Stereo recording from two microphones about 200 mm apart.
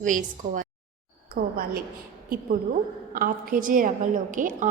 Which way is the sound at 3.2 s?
45° right (ahead or behind).